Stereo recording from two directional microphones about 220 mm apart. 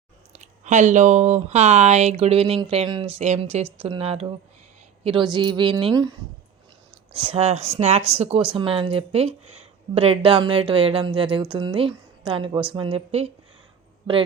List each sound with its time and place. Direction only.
0.3 s speech: 35° right (ahead or behind)